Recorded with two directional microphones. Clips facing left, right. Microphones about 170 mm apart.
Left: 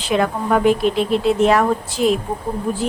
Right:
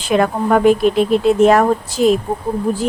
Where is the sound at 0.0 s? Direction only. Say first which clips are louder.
Right 3 dB; 50° right (ahead or behind).